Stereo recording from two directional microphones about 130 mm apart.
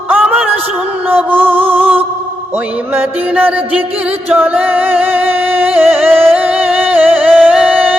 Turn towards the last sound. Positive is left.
turn(degrees=-10)  # may be behind; listen again after turning